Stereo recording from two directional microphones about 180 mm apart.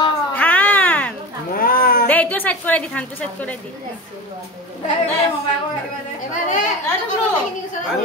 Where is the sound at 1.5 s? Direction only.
55° left (ahead or behind).